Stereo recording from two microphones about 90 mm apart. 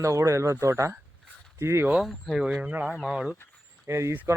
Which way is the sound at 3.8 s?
30° right (ahead or behind).